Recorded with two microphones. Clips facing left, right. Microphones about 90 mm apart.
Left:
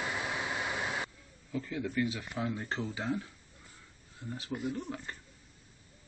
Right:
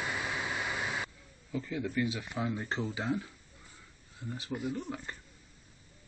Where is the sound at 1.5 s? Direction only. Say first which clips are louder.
Even; 5° right (ahead or behind).